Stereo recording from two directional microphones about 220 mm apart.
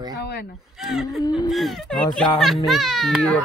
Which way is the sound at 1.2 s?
20° left (ahead or behind).